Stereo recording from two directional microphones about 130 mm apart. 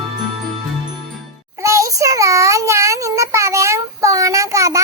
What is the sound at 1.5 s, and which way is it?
Child singing, 25° right (ahead or behind).